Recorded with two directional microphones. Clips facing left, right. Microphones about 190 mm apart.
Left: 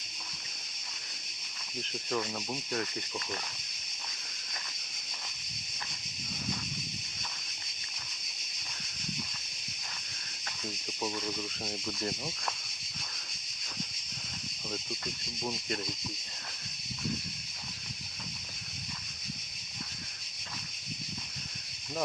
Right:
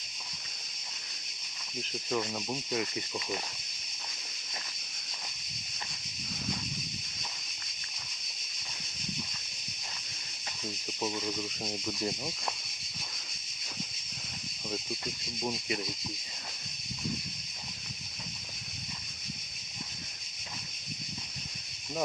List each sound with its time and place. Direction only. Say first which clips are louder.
1.8 s speech: right 1 dB; 5° right (ahead or behind)
11.0 s speech: right 1 dB; 10° right (ahead or behind)
15.0 s speech: right 2 dB; 15° right (ahead or behind)